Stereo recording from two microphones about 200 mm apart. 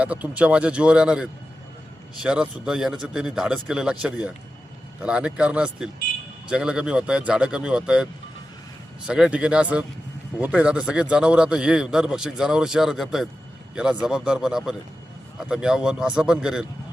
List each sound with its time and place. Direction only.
0.0 s a man's voice: 5° right (ahead or behind)
9.0 s a man's voice: 5° right (ahead or behind)